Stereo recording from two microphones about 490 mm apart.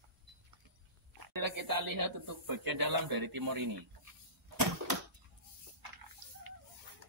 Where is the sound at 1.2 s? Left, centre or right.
Right.